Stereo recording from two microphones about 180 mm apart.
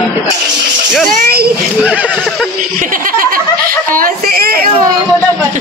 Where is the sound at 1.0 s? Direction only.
55° right (ahead or behind).